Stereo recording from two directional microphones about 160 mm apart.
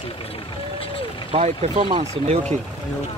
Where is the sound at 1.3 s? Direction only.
40° right (ahead or behind).